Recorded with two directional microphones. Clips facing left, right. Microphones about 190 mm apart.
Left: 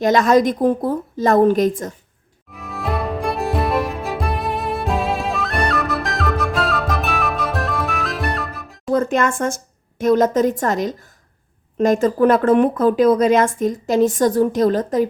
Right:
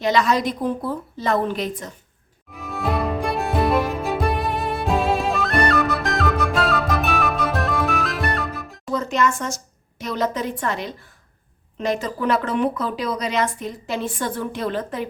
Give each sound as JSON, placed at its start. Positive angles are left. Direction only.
{"t": 0.0, "sound": "speech", "side_deg": 45}
{"t": 2.5, "sound": "music", "side_deg": 0}
{"t": 8.9, "sound": "music", "side_deg": 50}
{"t": 10.0, "sound": "speech", "side_deg": 50}